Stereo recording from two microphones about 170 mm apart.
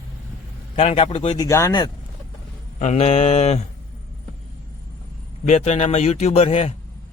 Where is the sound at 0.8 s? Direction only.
35° left (ahead or behind).